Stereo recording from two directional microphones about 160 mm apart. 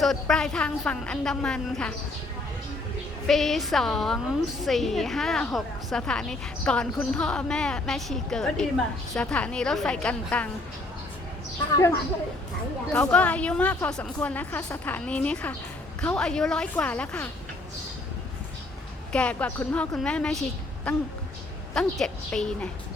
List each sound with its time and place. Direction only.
0.0 s a woman's voice: centre (ahead or behind)
3.2 s a woman's voice: centre (ahead or behind)
12.9 s a woman's voice: 10° left (ahead or behind)
19.1 s a woman's voice: 10° left (ahead or behind)